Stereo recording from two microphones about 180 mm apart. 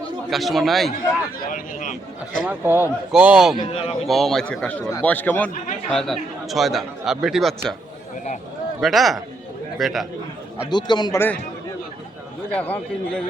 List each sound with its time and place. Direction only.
0.3 s speech: centre (ahead or behind)
1.4 s a man's voice: 50° left (ahead or behind)
2.4 s a man's voice: 10° right (ahead or behind)
3.6 s a man's voice: 30° left (ahead or behind)
4.0 s a man's voice: centre (ahead or behind)
8.8 s speech: centre (ahead or behind)
10.7 s a man's voice: 25° left (ahead or behind)
12.5 s a man's voice: 10° left (ahead or behind)